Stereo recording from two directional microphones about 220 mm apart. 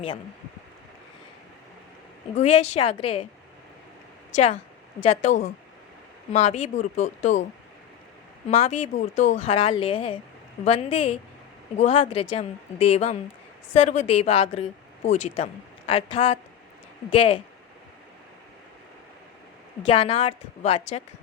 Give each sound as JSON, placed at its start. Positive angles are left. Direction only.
{"t": 2.3, "sound": "speech", "side_deg": 30}
{"t": 4.3, "sound": "speech", "side_deg": 30}
{"t": 8.4, "sound": "speech", "side_deg": 30}
{"t": 19.9, "sound": "speech", "side_deg": 25}